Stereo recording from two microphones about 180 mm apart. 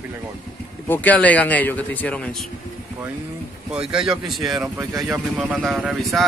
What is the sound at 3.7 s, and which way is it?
Speech, 5° right (ahead or behind).